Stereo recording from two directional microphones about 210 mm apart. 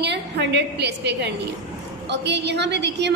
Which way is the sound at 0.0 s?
55° right (ahead or behind).